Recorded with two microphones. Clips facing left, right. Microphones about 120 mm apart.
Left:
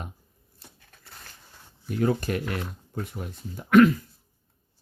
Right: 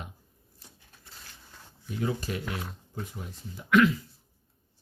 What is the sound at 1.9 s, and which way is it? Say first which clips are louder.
Speech: left 6 dB; 55° left (ahead or behind).